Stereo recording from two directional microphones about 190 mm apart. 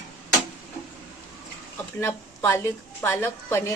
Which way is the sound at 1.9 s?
15° left (ahead or behind).